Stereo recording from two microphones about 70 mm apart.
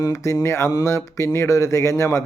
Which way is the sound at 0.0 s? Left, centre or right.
Left.